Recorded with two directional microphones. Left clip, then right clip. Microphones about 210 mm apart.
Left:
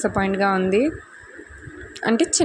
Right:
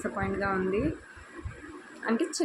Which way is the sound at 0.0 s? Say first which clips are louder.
Left 11 dB; 40° left (ahead or behind).